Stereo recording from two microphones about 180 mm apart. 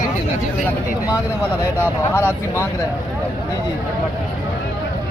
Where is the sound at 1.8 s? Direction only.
15° left (ahead or behind).